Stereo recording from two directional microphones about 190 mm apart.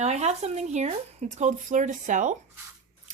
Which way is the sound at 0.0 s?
35° right (ahead or behind).